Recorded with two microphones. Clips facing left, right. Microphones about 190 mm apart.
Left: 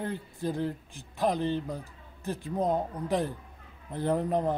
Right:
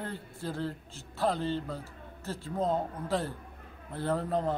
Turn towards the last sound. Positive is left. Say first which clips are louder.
# left 3 dB
turn(degrees=15)  # may be behind; listen again after turning